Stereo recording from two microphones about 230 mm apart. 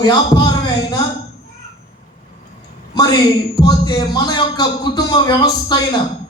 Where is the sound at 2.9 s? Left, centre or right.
Centre.